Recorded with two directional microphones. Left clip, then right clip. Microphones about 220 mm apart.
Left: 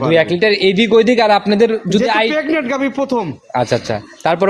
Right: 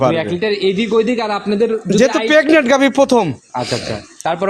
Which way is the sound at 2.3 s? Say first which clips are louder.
Right 6 dB; 45° right (ahead or behind).